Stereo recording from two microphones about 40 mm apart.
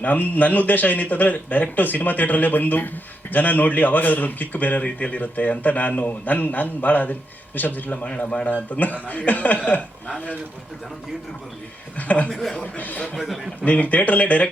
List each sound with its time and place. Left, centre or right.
0.0 s a man's voice: left
8.0 s speech: left
8.7 s a man's voice: left
11.9 s speech: left
12.3 s speech: centre
12.7 s a man's voice: left
13.1 s a man's voice: centre
13.7 s speech: left